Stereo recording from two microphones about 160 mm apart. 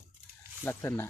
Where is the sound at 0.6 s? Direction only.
15° left (ahead or behind).